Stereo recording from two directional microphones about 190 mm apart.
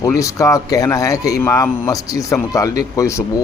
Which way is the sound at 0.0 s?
15° left (ahead or behind).